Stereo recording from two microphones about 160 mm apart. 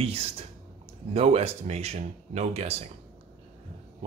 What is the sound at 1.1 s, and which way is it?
Speech, 40° right (ahead or behind).